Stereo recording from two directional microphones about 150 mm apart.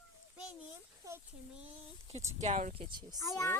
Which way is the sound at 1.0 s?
20° right (ahead or behind).